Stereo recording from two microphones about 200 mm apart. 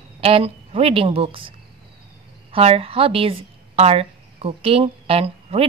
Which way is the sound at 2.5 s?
30° right (ahead or behind).